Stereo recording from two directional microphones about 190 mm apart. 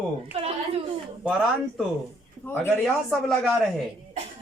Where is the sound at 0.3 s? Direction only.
30° right (ahead or behind).